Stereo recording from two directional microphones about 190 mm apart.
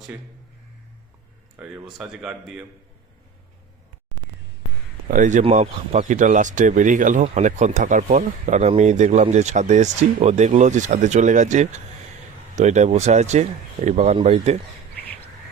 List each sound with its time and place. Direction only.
1.5 s speech: 5° right (ahead or behind)
5.1 s speech: 40° right (ahead or behind)